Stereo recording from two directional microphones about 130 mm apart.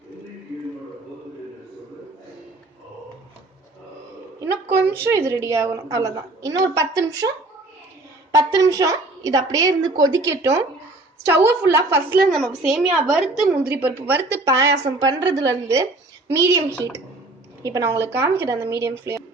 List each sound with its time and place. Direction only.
4.9 s a woman's voice: 20° right (ahead or behind)
8.3 s a woman's voice: 25° right (ahead or behind)
12.3 s a woman's voice: centre (ahead or behind)
14.1 s a woman's voice: 25° right (ahead or behind)